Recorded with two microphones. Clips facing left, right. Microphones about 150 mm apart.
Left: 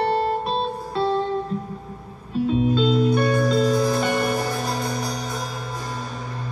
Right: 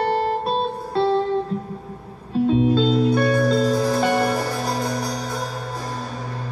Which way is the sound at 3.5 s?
35° right (ahead or behind).